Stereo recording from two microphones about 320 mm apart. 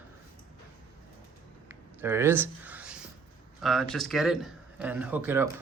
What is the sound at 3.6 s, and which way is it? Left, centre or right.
Speech, centre.